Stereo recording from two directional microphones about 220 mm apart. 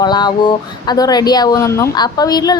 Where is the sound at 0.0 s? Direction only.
20° left (ahead or behind).